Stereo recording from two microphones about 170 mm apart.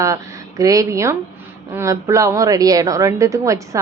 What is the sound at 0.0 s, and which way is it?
A woman's voice, 20° right (ahead or behind).